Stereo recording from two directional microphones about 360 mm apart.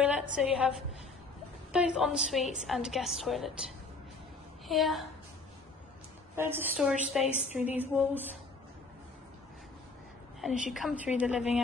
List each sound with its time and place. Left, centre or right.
0.0 s a woman's voice: centre
4.6 s a woman's voice: centre
6.3 s a woman's voice: centre
7.2 s a woman's voice: centre
7.7 s a woman's voice: centre
10.7 s a woman's voice: centre